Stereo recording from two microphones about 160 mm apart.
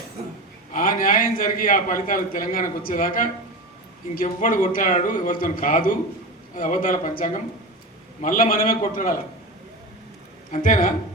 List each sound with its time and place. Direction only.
0.7 s a man's voice: 60° left (ahead or behind)
10.5 s a man's voice: 55° left (ahead or behind)